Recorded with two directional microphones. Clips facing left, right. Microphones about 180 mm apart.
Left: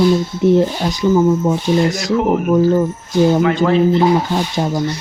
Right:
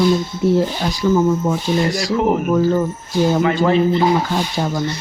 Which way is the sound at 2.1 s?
Centre (ahead or behind).